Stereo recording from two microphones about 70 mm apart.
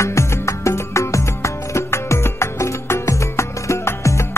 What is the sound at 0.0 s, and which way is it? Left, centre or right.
Music, left.